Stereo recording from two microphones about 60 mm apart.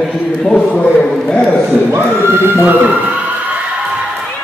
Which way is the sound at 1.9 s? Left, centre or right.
Right.